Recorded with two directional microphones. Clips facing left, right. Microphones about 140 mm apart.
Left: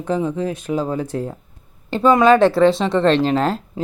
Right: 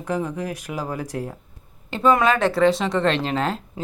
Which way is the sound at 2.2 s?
Centre (ahead or behind).